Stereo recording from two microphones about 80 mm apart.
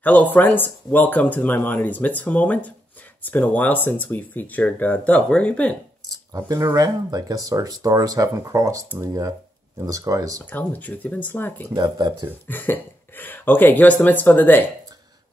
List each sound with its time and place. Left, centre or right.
0.0 s speech: left
6.3 s speech: right
10.4 s speech: left
11.7 s speech: right
12.4 s speech: left